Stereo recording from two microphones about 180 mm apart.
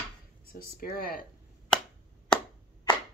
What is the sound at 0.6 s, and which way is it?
Speech, 55° left (ahead or behind).